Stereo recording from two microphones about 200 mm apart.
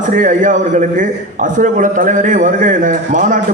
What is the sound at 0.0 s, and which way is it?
A man's voice, 40° right (ahead or behind).